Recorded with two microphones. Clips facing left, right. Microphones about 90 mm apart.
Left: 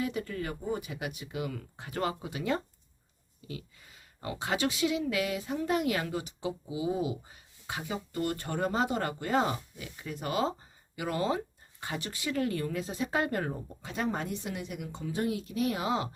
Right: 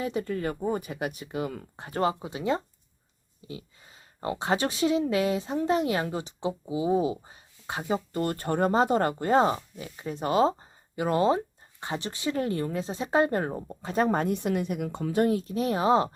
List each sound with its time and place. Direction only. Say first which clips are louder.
0.0 s speech: right 4 dB; 30° right (ahead or behind); by 15.3 s 55° right (ahead or behind)
15.3 s speech: right 5 dB; 35° right (ahead or behind)